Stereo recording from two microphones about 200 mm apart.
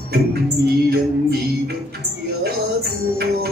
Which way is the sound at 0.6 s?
55° right (ahead or behind).